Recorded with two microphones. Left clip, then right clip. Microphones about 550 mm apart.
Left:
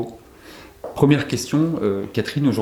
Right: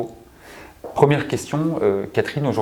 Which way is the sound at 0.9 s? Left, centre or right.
Right.